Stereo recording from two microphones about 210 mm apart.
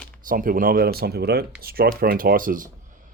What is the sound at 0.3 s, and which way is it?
Speech, 40° right (ahead or behind).